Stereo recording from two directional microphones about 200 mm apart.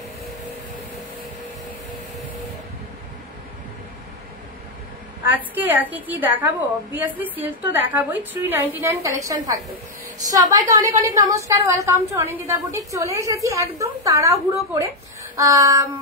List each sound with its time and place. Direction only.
5.5 s speech: 10° right (ahead or behind)
10.3 s speech: 20° right (ahead or behind)